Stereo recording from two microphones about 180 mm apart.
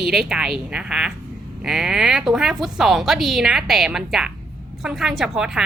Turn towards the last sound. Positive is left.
turn(degrees=-5)  # may be behind; listen again after turning